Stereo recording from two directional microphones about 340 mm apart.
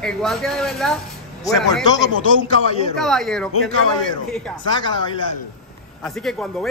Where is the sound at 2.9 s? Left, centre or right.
Centre.